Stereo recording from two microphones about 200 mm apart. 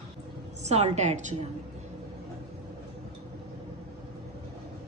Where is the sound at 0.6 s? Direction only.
35° right (ahead or behind).